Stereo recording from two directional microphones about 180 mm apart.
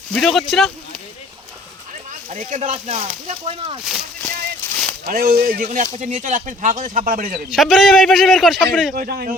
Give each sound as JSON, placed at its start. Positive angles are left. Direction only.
{"t": 0.1, "sound": "speech", "side_deg": 0}
{"t": 2.3, "sound": "speech", "side_deg": -45}
{"t": 3.8, "sound": "a man's voice", "side_deg": 0}
{"t": 5.0, "sound": "speech", "side_deg": -55}
{"t": 7.5, "sound": "a man's voice", "side_deg": 0}
{"t": 9.0, "sound": "a man's voice", "side_deg": -55}